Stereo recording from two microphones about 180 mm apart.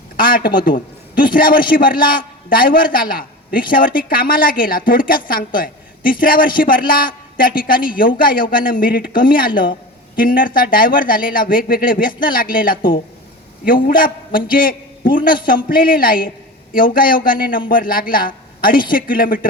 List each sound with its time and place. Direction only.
0.2 s a man's voice: 55° left (ahead or behind)